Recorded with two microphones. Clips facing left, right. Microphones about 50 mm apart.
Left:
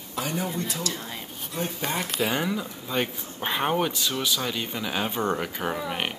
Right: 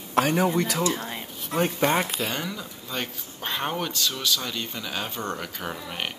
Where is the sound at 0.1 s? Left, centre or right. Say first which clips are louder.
Right 8 dB; right.